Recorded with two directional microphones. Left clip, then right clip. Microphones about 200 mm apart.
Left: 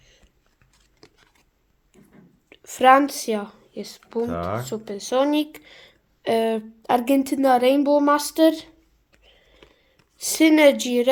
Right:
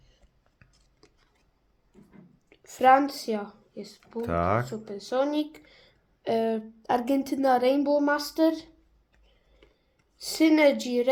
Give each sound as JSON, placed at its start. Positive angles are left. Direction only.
{"t": 1.0, "sound": "a sound", "side_deg": 25}
{"t": 2.5, "sound": "speech", "side_deg": 30}
{"t": 4.3, "sound": "speech", "side_deg": -45}
{"t": 4.6, "sound": "speech", "side_deg": 40}
{"t": 9.2, "sound": "whispering", "side_deg": 30}
{"t": 10.2, "sound": "a woman's voice", "side_deg": 30}